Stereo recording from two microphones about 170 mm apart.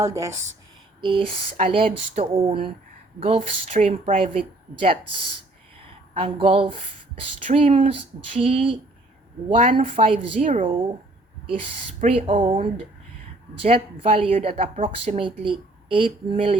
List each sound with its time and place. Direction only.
0.0 s speech: 20° right (ahead or behind)
1.0 s speech: 30° right (ahead or behind)
11.9 s speech: 40° right (ahead or behind)